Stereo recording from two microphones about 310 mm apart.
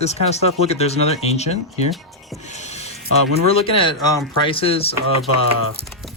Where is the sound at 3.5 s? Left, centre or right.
Centre.